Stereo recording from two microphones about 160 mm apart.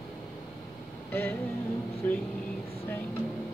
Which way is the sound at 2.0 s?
10° left (ahead or behind).